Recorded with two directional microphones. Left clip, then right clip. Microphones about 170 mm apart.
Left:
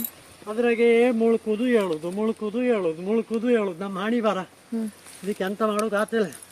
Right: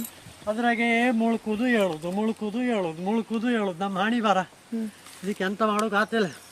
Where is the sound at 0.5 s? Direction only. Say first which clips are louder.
Left 5 dB; 30° right (ahead or behind).